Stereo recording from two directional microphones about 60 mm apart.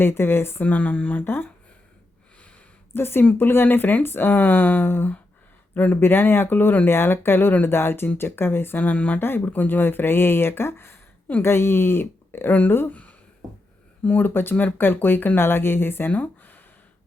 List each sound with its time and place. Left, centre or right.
0.0 s speech: left
0.6 s speech: left
2.9 s speech: left
9.2 s speech: left
12.9 s a sound: left
14.0 s speech: left
14.3 s speech: left